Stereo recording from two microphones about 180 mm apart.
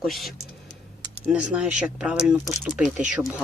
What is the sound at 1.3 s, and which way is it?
Speech, 5° right (ahead or behind).